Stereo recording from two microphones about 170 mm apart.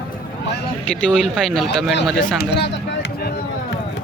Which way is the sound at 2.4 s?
90° left.